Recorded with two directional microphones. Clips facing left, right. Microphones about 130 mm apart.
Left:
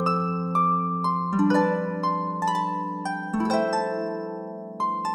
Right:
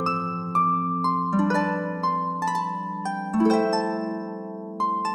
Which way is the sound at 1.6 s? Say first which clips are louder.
Left 2 dB; 5° left (ahead or behind).